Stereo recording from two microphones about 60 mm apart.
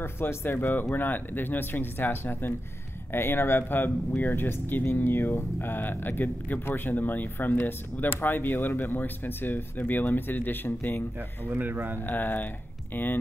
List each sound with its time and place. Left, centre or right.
0.0 s speech: left
11.4 s speech: right
12.1 s speech: left